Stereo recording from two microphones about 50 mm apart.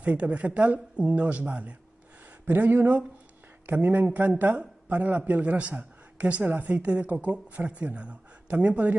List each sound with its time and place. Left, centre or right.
0.0 s a man's voice: right